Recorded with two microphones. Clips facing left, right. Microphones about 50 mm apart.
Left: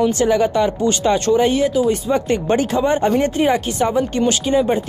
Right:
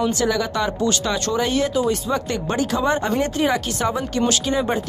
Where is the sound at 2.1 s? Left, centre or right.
Left.